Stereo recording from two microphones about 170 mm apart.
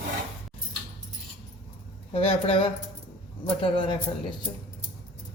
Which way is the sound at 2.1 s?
35° left (ahead or behind).